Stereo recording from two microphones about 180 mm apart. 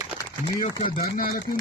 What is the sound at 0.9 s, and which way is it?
Speech, 55° left (ahead or behind).